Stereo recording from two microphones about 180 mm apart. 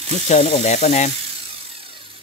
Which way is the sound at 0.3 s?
40° left (ahead or behind).